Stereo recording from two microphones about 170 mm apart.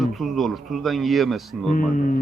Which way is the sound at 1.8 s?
50° left (ahead or behind).